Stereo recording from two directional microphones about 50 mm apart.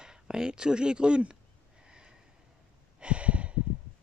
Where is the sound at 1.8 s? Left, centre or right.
Centre.